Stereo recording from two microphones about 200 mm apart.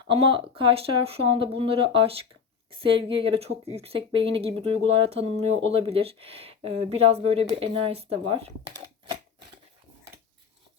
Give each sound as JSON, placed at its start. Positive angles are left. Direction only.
{"t": 0.1, "sound": "speech", "side_deg": -25}